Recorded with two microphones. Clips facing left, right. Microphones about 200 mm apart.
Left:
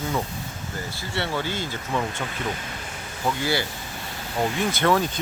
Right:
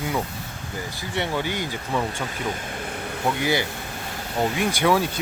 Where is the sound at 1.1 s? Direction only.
15° right (ahead or behind).